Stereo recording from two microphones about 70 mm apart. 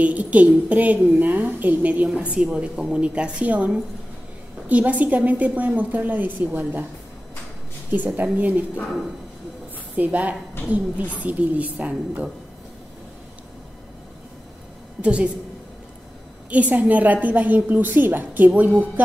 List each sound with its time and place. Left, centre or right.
0.0 s a woman's voice: right
7.9 s a woman's voice: right
9.9 s a woman's voice: right
15.0 s a woman's voice: centre
16.4 s a woman's voice: right